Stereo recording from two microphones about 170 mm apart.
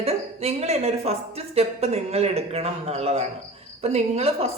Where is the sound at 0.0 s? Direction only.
40° right (ahead or behind).